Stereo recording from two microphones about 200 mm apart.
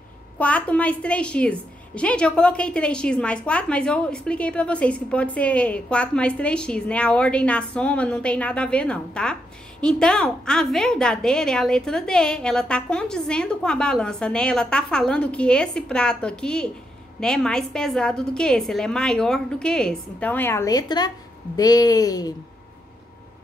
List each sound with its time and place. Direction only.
0.4 s a woman's voice: 5° left (ahead or behind)